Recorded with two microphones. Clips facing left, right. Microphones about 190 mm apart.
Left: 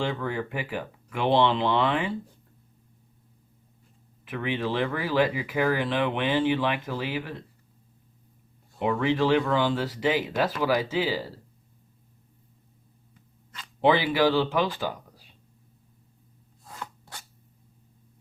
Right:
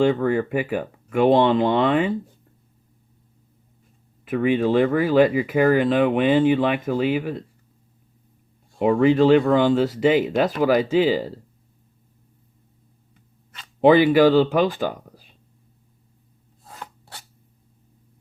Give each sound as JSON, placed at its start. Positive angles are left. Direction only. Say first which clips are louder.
{"t": 0.1, "sound": "speech", "louder": "right 10 dB", "side_deg": -45}
{"t": 4.3, "sound": "speech", "louder": "right 10 dB", "side_deg": -45}
{"t": 8.8, "sound": "speech", "louder": "right 8 dB", "side_deg": -45}
{"t": 13.8, "sound": "speech", "louder": "right 8 dB", "side_deg": -50}